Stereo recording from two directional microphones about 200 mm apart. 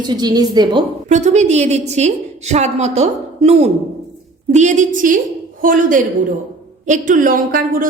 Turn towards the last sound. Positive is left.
turn(degrees=-45)  # may be behind; listen again after turning